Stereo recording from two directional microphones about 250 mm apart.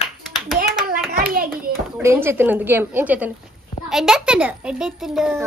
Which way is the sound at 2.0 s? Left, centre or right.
Centre.